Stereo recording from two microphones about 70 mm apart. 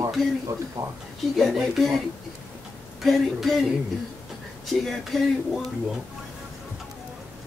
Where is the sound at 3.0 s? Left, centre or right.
Centre.